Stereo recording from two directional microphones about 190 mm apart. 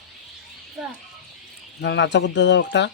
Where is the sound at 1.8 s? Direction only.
65° left (ahead or behind).